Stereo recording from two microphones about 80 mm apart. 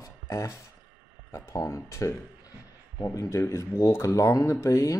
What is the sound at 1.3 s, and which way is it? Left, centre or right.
Speech, left.